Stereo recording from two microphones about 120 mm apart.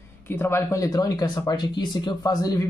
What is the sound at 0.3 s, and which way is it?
Speech, 20° left (ahead or behind).